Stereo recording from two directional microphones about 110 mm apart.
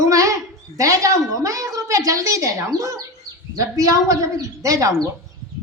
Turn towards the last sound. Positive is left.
turn(degrees=-30)  # may be behind; listen again after turning